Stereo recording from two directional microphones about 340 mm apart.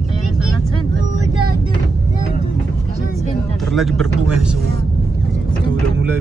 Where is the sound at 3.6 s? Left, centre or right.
Centre.